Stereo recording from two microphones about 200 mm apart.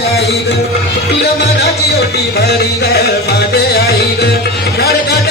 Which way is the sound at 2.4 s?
50° left (ahead or behind).